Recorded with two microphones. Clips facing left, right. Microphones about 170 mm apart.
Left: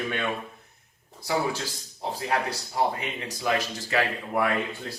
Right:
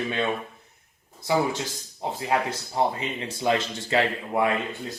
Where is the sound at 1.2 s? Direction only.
20° right (ahead or behind).